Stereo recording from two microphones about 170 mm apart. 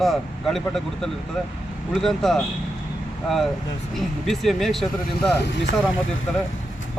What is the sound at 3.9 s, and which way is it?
Speech, centre (ahead or behind).